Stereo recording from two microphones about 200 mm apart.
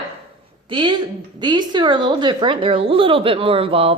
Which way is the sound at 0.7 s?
25° right (ahead or behind).